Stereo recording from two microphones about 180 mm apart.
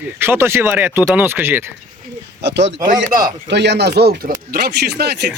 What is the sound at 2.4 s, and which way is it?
A man's voice, 75° right (ahead or behind).